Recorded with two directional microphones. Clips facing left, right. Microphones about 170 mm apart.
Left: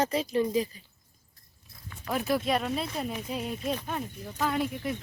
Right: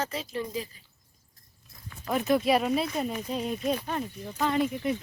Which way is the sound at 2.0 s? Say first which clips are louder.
Right 3 dB; centre (ahead or behind).